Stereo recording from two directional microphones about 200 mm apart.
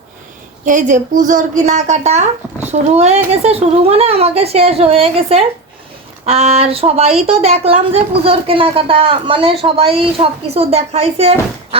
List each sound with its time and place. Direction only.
0.6 s a woman's voice: 40° right (ahead or behind)